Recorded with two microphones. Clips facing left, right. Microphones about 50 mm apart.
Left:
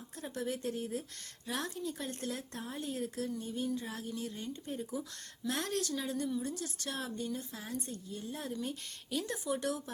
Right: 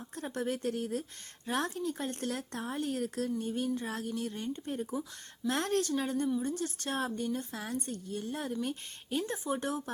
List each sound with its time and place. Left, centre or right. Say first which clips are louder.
0.2 s a woman's voice: right 3 dB; right
8.7 s a woman's voice: right 3 dB; right